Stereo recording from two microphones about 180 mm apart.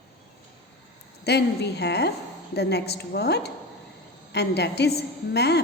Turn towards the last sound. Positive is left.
turn(degrees=65)  # may be behind; listen again after turning